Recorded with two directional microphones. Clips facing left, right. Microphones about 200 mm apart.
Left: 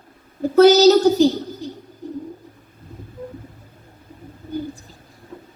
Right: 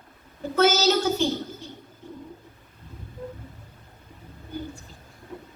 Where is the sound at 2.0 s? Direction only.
35° left (ahead or behind).